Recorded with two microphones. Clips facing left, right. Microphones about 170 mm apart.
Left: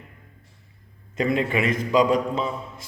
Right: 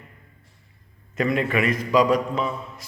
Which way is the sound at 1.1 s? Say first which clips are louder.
Even; 25° left (ahead or behind).